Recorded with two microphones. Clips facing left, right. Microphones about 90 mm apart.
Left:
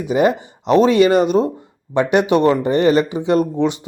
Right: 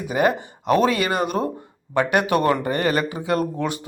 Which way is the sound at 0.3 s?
20° left (ahead or behind).